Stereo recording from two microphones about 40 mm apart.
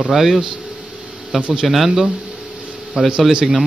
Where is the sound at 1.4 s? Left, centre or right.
Right.